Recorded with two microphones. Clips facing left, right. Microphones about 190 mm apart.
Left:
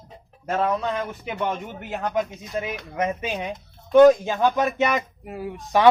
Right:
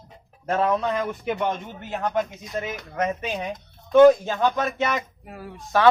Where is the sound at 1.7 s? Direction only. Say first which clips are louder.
Left 1 dB; 10° left (ahead or behind).